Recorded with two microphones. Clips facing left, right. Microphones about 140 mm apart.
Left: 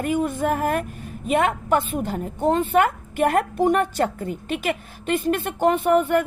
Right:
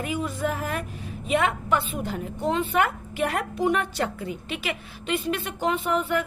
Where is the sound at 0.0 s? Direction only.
50° left (ahead or behind).